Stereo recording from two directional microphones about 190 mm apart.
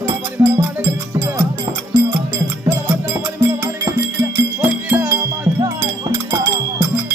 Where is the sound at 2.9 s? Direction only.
10° right (ahead or behind).